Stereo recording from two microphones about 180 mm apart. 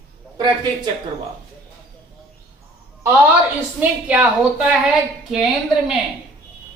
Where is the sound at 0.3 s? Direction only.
20° right (ahead or behind).